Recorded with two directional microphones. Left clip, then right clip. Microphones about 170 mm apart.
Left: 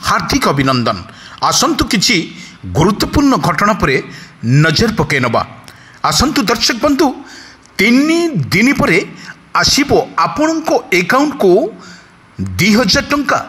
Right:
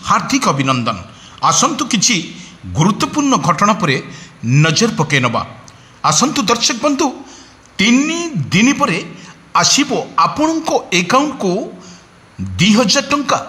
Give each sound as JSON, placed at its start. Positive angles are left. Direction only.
{"t": 0.0, "sound": "speech", "side_deg": 25}
{"t": 1.4, "sound": "speech", "side_deg": 35}
{"t": 3.3, "sound": "a man's voice", "side_deg": 25}
{"t": 4.6, "sound": "speech", "side_deg": 25}
{"t": 12.8, "sound": "a man's voice", "side_deg": 20}